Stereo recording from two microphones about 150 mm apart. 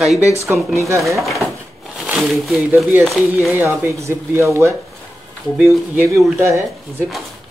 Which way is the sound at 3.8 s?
20° right (ahead or behind).